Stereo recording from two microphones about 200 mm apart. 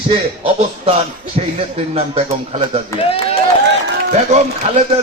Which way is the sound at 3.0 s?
30° left (ahead or behind).